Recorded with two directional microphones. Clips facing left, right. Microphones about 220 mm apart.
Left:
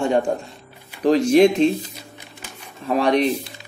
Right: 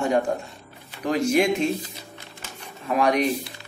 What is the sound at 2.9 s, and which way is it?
Speech, 30° left (ahead or behind).